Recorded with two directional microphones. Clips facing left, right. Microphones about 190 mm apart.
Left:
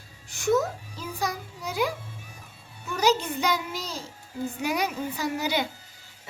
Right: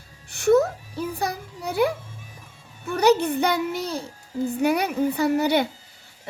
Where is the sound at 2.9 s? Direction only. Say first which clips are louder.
Right 6 dB; 60° right (ahead or behind).